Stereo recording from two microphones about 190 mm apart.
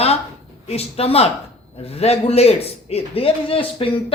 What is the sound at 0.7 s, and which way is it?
A man's voice, 30° left (ahead or behind).